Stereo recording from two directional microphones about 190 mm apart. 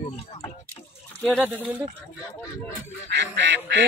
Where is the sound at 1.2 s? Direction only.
5° left (ahead or behind).